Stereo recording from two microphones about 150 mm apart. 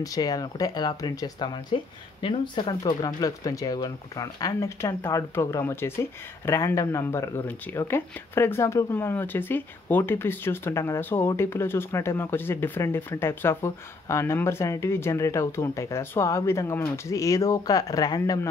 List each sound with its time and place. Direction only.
0.0 s speech: 25° left (ahead or behind)